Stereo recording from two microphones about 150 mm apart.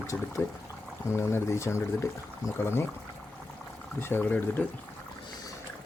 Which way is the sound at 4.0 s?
15° left (ahead or behind).